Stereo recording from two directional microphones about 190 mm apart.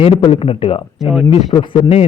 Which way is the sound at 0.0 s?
30° left (ahead or behind).